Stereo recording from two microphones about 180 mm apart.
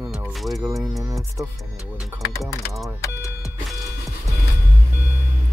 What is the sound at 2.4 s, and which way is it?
Speech, centre (ahead or behind).